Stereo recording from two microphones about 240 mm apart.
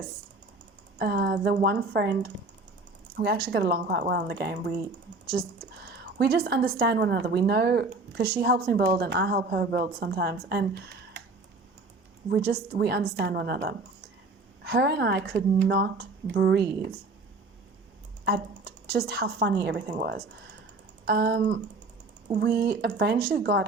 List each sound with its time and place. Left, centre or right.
0.9 s a woman's voice: right
5.9 s a woman's voice: right
12.3 s speech: right
18.3 s a woman's voice: right